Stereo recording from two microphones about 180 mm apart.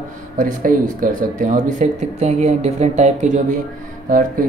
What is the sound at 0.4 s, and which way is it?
Speech, 45° right (ahead or behind).